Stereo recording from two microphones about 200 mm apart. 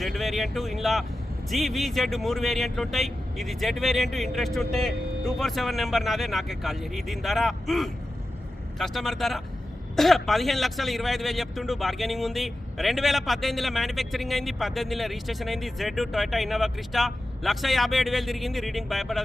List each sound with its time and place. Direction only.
0.0 s a man's voice: centre (ahead or behind)